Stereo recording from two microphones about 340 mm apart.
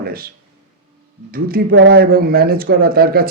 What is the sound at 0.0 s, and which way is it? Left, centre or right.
Speech, right.